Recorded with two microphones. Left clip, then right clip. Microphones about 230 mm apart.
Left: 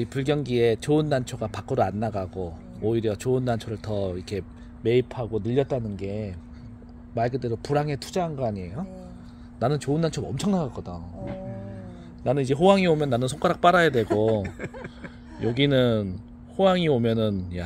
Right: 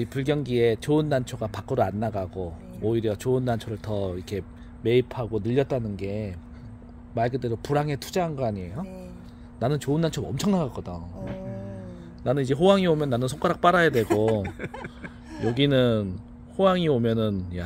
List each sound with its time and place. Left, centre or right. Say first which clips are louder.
0.0 s speech: left 1 dB; centre
12.2 s speech: left 1 dB; centre